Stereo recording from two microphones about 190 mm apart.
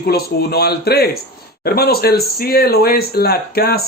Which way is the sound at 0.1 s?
55° left (ahead or behind).